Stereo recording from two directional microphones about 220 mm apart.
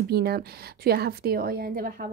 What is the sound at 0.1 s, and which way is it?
Speech, 45° right (ahead or behind).